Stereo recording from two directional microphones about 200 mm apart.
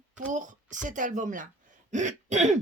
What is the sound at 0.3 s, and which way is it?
Speech, 40° right (ahead or behind).